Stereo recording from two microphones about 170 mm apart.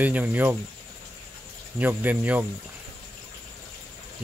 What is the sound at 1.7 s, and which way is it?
Speech, 10° right (ahead or behind).